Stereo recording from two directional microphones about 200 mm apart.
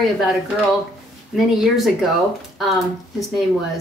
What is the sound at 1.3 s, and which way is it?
Speech, centre (ahead or behind).